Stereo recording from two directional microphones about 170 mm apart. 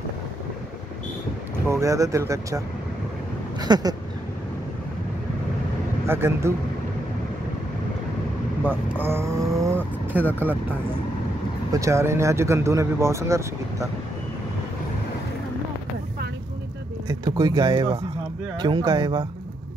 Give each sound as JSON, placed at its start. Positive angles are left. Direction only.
{"t": 1.7, "sound": "speech", "side_deg": -20}
{"t": 3.6, "sound": "speech", "side_deg": -25}
{"t": 6.0, "sound": "speech", "side_deg": -15}
{"t": 8.6, "sound": "speech", "side_deg": -10}
{"t": 10.1, "sound": "speech", "side_deg": -10}
{"t": 11.7, "sound": "speech", "side_deg": -15}
{"t": 17.1, "sound": "speech", "side_deg": -20}